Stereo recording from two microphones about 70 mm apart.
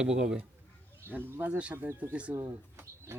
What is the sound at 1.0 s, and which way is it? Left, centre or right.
Speech, right.